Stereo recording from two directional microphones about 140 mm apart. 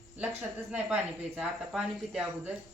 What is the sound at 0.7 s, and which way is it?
Speech, 10° right (ahead or behind).